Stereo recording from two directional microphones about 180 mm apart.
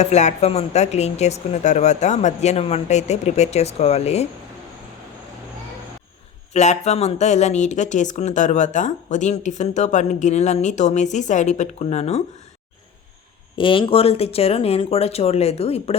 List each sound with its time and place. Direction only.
0.0 s speech: 40° left (ahead or behind)
6.5 s speech: 40° left (ahead or behind)
13.6 s speech: 30° left (ahead or behind)